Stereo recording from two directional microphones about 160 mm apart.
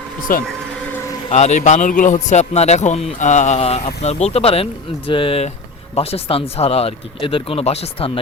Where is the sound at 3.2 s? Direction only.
50° left (ahead or behind).